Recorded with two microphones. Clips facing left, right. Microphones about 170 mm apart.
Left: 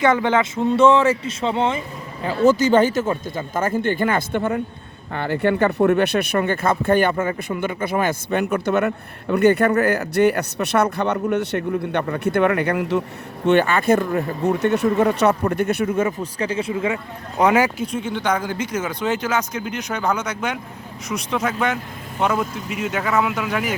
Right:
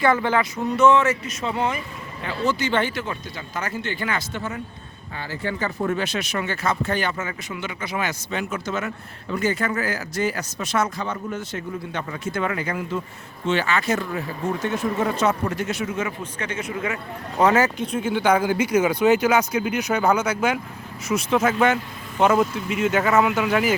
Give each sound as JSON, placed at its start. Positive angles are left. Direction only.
{"t": 0.0, "sound": "speech", "side_deg": 20}
{"t": 2.2, "sound": "speech", "side_deg": 45}
{"t": 13.4, "sound": "speech", "side_deg": 55}
{"t": 16.2, "sound": "speech", "side_deg": 35}
{"t": 17.4, "sound": "speech", "side_deg": 10}
{"t": 17.9, "sound": "speech", "side_deg": -5}